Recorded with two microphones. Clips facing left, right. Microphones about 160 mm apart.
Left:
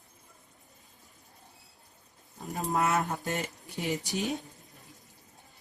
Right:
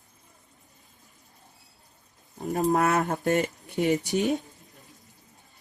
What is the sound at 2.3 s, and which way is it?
Speech, 40° right (ahead or behind).